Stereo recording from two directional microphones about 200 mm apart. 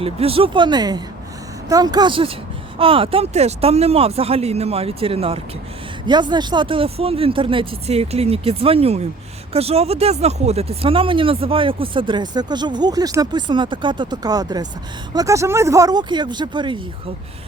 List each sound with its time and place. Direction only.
0.0 s speech: 30° right (ahead or behind)